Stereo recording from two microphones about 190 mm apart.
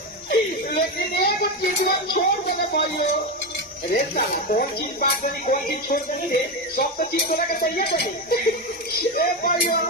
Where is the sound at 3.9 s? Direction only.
45° left (ahead or behind).